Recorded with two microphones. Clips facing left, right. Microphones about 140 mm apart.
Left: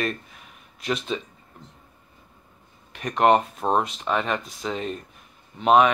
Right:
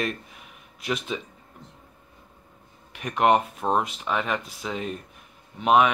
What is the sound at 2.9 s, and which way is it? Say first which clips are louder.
Speech: left 2 dB; 10° right (ahead or behind).